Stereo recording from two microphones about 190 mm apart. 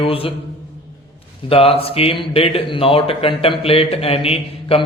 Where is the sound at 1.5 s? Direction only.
30° left (ahead or behind).